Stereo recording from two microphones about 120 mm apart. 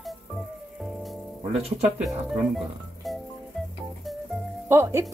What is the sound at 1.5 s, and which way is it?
Speech, 60° right (ahead or behind).